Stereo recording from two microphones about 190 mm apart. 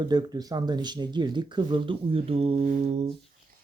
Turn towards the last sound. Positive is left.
turn(degrees=-35)  # may be behind; listen again after turning